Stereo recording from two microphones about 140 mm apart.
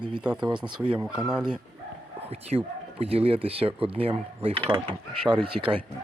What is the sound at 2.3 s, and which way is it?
Speech, 45° right (ahead or behind).